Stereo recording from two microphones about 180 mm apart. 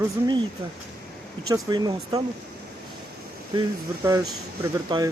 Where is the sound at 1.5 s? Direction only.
20° right (ahead or behind).